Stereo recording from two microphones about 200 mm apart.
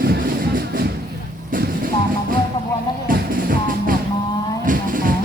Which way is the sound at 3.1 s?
45° right (ahead or behind).